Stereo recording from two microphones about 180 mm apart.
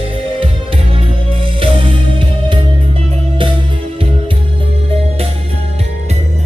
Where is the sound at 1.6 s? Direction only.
30° right (ahead or behind).